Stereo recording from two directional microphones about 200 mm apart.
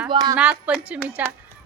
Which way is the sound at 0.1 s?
20° right (ahead or behind).